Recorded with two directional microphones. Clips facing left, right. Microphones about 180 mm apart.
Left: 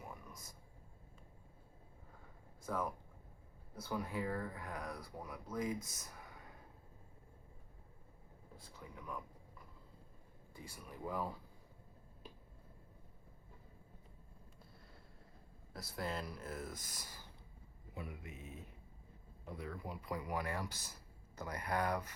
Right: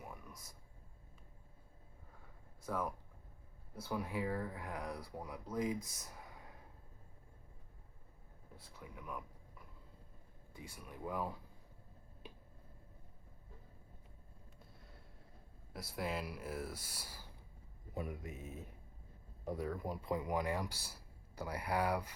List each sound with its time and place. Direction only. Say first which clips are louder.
2.6 s speech: even; 5° right (ahead or behind)
8.5 s speech: even; 5° right (ahead or behind)
10.5 s speech: even; centre (ahead or behind)
16.0 s speech: right 2 dB; 5° right (ahead or behind)
17.9 s speech: right 5 dB; 45° right (ahead or behind)
20.0 s speech: right 3 dB; 25° right (ahead or behind)